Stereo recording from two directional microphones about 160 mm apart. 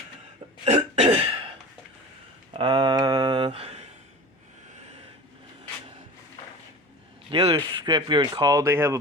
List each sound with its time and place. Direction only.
0.6 s cough: 40° right (ahead or behind)
2.5 s a sound: 35° right (ahead or behind)
7.3 s speech: 35° right (ahead or behind); by 9.0 s 15° right (ahead or behind)